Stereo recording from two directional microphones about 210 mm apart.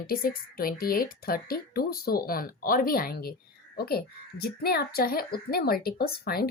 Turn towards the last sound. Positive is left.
turn(degrees=45)  # may be behind; listen again after turning